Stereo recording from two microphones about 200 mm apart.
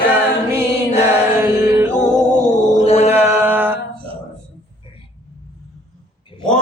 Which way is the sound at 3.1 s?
10° right (ahead or behind).